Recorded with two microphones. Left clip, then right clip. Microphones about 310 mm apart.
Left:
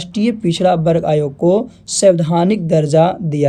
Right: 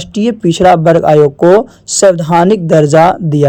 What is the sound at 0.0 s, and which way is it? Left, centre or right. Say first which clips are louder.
Speech: right 5 dB; centre.